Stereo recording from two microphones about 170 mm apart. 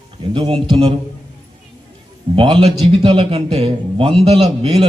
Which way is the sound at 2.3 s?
30° right (ahead or behind).